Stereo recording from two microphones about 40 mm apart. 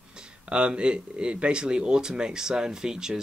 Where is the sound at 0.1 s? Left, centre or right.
Right.